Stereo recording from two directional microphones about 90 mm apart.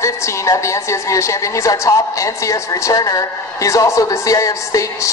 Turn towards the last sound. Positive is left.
turn(degrees=35)  # may be behind; listen again after turning